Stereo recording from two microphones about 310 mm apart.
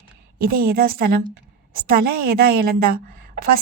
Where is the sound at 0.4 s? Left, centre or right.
Right.